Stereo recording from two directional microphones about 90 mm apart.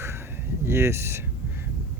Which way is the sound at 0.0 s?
30° right (ahead or behind).